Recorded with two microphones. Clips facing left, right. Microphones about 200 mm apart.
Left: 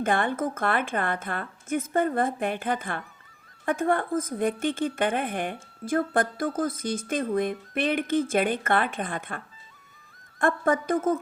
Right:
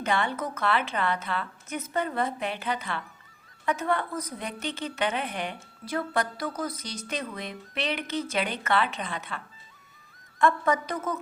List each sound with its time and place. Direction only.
0.0 s a woman's voice: 50° left (ahead or behind)